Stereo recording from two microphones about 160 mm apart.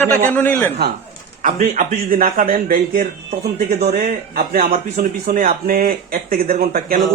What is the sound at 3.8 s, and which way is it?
Speech, 45° right (ahead or behind).